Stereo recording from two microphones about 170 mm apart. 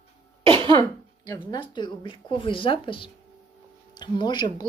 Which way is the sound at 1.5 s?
25° left (ahead or behind).